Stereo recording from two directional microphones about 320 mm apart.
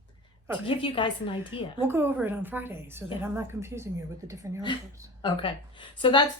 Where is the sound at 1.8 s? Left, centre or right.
Centre.